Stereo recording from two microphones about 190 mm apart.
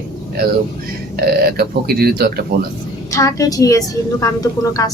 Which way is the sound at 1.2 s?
55° right (ahead or behind).